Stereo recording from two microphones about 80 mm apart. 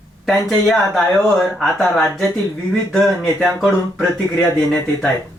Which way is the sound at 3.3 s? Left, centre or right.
Centre.